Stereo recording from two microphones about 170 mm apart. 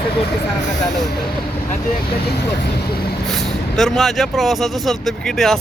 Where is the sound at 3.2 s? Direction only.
Centre (ahead or behind).